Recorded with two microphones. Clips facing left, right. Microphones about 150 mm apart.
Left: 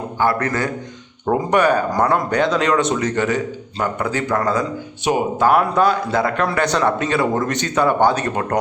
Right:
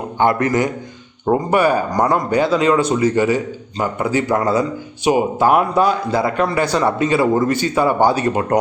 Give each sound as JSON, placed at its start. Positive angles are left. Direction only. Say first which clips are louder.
{"t": 0.2, "sound": "a man's voice", "louder": "right 4 dB", "side_deg": -20}
{"t": 1.3, "sound": "speech", "louder": "right 1 dB", "side_deg": -5}